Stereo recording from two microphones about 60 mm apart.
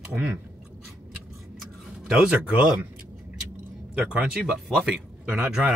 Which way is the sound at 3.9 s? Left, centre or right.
Centre.